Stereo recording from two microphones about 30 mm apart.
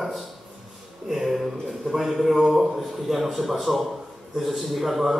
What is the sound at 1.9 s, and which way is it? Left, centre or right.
A man's voice, centre.